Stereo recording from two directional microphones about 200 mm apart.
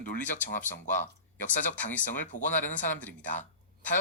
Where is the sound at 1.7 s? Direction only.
10° left (ahead or behind).